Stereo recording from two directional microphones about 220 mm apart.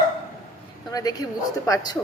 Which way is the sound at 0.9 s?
15° left (ahead or behind).